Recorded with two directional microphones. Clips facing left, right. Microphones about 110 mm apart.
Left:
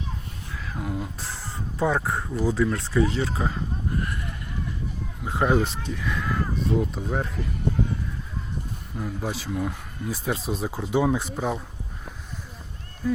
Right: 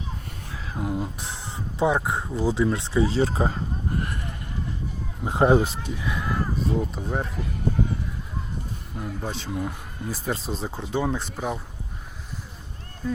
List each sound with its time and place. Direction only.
0.7 s speech: 25° right (ahead or behind)
2.3 s speech: 30° right (ahead or behind)
4.0 s a sound: 40° right (ahead or behind)
5.2 s speech: 25° right (ahead or behind)
5.6 s speech: 5° right (ahead or behind)
9.0 s speech: 5° left (ahead or behind)